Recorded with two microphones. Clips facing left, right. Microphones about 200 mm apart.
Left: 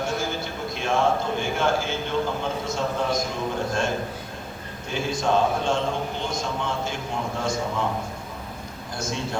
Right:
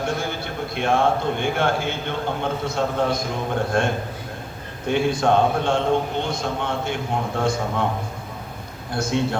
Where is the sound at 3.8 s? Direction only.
60° right (ahead or behind).